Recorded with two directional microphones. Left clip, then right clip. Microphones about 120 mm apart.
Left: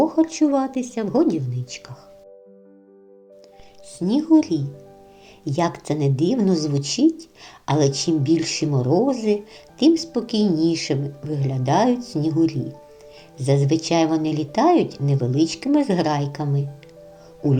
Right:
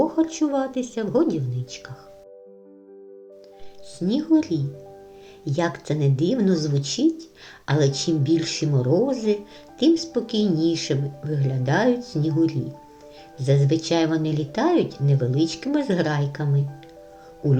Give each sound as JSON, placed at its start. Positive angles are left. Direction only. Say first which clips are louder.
{"t": 0.0, "sound": "speech", "louder": "left 3 dB", "side_deg": 35}
{"t": 3.9, "sound": "speech", "louder": "left 3 dB", "side_deg": 30}